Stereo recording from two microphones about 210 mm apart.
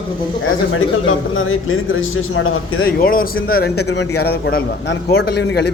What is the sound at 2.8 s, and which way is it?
A man's voice, 45° left (ahead or behind).